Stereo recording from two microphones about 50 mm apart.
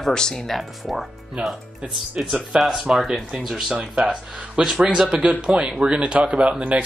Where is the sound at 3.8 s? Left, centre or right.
Centre.